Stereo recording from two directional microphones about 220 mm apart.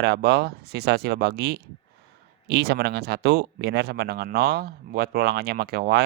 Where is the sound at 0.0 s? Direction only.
50° right (ahead or behind).